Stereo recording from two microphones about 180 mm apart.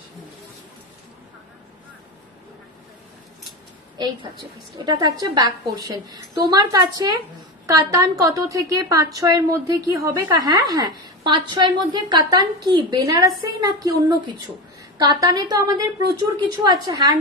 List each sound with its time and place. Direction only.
4.8 s a woman's voice: 20° right (ahead or behind)